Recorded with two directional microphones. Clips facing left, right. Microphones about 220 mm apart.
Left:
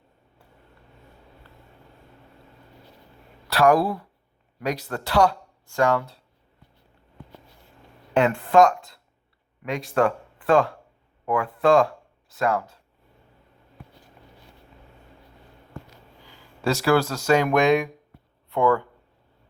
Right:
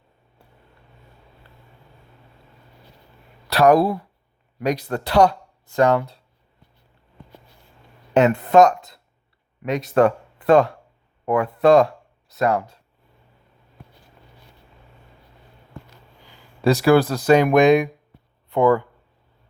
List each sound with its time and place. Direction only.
3.5 s speech: 20° right (ahead or behind)
8.1 s speech: 20° right (ahead or behind)
16.6 s a sound: 15° right (ahead or behind)
18.5 s speech: 15° right (ahead or behind)